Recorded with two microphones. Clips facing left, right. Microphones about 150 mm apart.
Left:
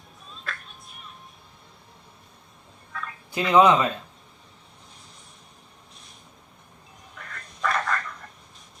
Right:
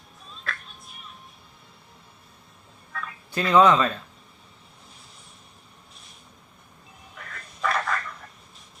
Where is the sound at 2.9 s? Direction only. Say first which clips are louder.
Even; centre (ahead or behind).